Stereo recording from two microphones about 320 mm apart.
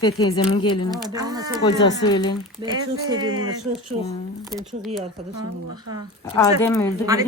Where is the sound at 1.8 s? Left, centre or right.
Centre.